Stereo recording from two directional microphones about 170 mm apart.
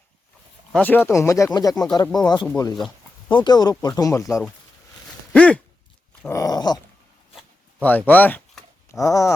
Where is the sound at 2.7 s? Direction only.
Centre (ahead or behind).